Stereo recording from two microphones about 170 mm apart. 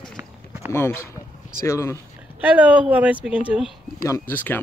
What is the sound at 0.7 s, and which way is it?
Speech, 15° left (ahead or behind).